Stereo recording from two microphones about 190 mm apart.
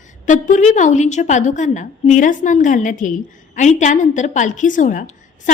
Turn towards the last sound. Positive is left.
turn(degrees=45)  # may be behind; listen again after turning